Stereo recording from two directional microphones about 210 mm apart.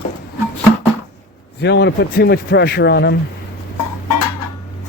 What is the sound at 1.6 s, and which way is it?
A man's voice, 55° left (ahead or behind).